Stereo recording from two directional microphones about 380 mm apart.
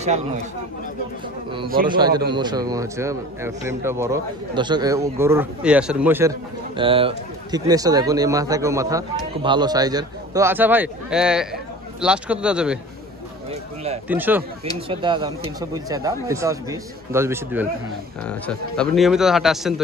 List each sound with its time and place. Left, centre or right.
0.0 s a man's voice: centre
1.5 s a man's voice: centre
14.0 s a man's voice: centre